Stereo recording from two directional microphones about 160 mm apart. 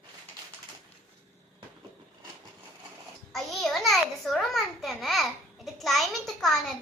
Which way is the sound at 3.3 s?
Centre (ahead or behind).